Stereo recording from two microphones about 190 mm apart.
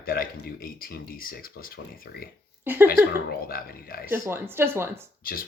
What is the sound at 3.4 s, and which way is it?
Speech, 50° left (ahead or behind).